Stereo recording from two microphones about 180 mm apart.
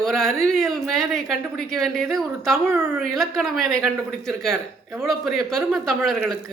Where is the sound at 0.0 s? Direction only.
Centre (ahead or behind).